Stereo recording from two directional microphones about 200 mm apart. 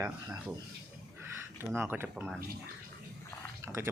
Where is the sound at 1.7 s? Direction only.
10° right (ahead or behind).